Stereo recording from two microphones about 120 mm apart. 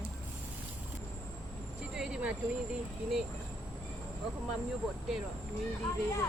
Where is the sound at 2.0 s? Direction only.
5° right (ahead or behind).